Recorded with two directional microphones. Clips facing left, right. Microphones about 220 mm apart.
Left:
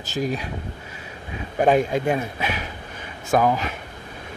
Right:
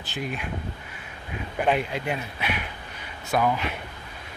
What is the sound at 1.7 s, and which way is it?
Speech, 45° left (ahead or behind).